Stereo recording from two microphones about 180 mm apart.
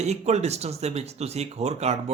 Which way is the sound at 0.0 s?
40° right (ahead or behind).